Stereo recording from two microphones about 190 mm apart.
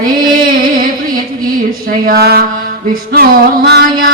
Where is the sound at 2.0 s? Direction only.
55° right (ahead or behind).